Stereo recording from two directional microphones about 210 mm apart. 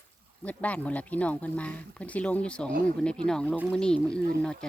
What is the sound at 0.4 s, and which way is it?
Speech, 5° left (ahead or behind).